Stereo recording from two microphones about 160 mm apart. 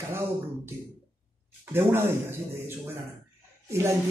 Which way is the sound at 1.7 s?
15° right (ahead or behind).